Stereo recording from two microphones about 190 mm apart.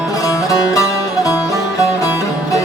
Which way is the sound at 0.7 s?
15° left (ahead or behind).